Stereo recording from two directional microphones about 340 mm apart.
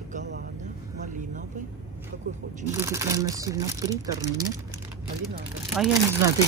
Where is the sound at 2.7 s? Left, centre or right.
Centre.